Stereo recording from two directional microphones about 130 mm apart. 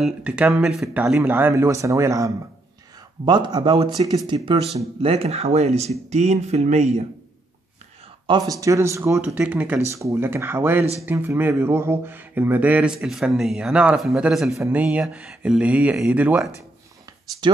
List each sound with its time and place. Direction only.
0.0 s speech: 10° right (ahead or behind)
1.1 s speech: 15° right (ahead or behind)
3.3 s speech: 35° right (ahead or behind)
5.0 s speech: 50° right (ahead or behind)
8.3 s speech: 25° right (ahead or behind); by 14.6 s centre (ahead or behind)
14.6 s speech: 10° right (ahead or behind)